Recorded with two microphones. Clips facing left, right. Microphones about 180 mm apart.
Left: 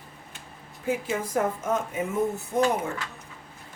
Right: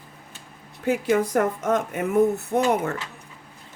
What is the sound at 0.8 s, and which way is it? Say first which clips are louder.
Speech: right 7 dB; 75° right (ahead or behind).